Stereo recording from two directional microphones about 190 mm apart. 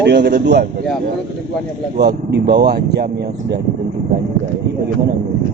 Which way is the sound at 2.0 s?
60° right (ahead or behind).